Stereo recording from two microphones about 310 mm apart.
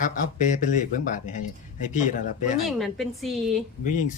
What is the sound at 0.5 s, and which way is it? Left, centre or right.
Speech, left.